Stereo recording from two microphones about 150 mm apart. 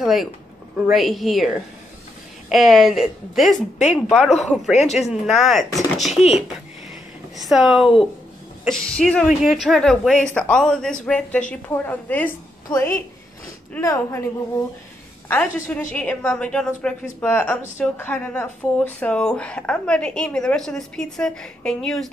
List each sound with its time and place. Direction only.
0.0 s a woman's voice: centre (ahead or behind)
4.7 s speech: 45° left (ahead or behind)
5.2 s a woman's voice: centre (ahead or behind)
7.3 s a woman's voice: centre (ahead or behind)